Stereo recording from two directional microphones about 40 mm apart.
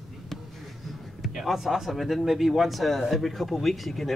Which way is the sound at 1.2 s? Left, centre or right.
Centre.